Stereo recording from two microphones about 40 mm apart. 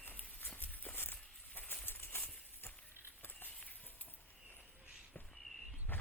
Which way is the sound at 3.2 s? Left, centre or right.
Left.